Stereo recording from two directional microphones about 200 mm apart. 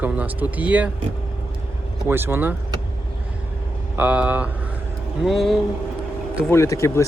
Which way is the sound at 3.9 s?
5° right (ahead or behind).